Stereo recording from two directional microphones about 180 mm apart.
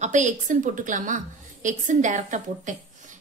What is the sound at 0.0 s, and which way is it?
A woman's voice, 45° right (ahead or behind).